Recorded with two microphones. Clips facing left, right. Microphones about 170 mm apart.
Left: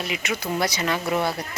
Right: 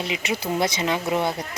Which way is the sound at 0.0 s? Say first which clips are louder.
Right 1 dB; 25° right (ahead or behind).